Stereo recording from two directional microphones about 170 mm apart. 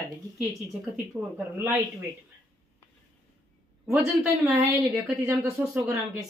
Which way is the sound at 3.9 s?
10° right (ahead or behind).